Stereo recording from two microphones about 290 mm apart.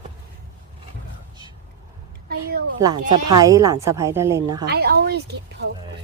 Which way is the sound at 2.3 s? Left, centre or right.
Right.